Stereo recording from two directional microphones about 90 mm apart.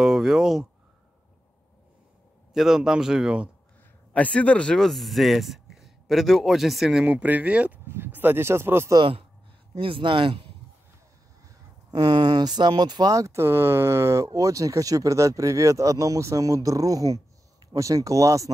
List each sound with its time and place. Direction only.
0.0 s speech: centre (ahead or behind)
2.5 s speech: 5° right (ahead or behind)
4.1 s speech: 15° left (ahead or behind); by 8.9 s 30° right (ahead or behind)
9.8 s speech: 80° right
11.4 s speech: 45° right (ahead or behind)
13.1 s speech: 35° right (ahead or behind)